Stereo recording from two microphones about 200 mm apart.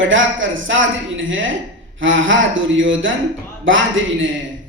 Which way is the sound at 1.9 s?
70° right (ahead or behind).